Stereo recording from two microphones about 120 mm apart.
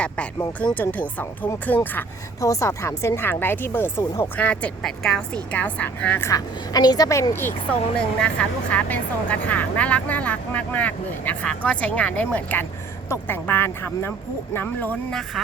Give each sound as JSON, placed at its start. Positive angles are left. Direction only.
{"t": 0.6, "sound": "speech", "side_deg": 15}
{"t": 2.4, "sound": "speech", "side_deg": 25}
{"t": 6.3, "sound": "speech", "side_deg": 30}
{"t": 8.2, "sound": "speech", "side_deg": 10}